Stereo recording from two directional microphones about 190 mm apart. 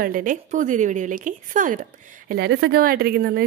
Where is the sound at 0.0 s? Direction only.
45° right (ahead or behind).